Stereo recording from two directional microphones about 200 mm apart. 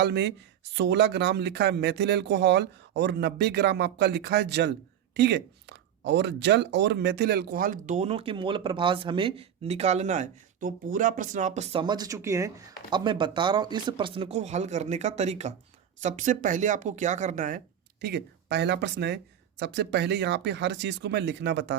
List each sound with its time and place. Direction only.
0.0 s speech: 60° right (ahead or behind); by 17.6 s 40° right (ahead or behind)
18.0 s speech: 55° right (ahead or behind)